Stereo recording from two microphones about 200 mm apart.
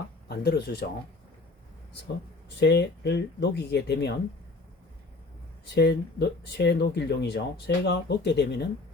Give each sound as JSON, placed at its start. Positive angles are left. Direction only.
{"t": 0.3, "sound": "speech", "side_deg": 55}
{"t": 2.6, "sound": "speech", "side_deg": 55}
{"t": 5.6, "sound": "speech", "side_deg": 55}